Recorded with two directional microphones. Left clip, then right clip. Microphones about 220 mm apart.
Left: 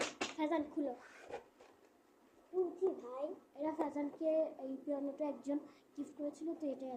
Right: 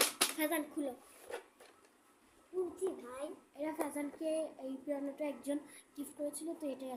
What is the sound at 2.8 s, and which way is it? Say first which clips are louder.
A child's voice: left 2 dB; 20° right (ahead or behind).